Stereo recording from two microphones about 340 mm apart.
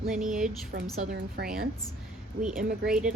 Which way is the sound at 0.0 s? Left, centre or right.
Centre.